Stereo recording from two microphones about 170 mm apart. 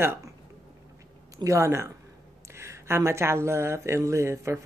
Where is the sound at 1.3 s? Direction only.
20° right (ahead or behind).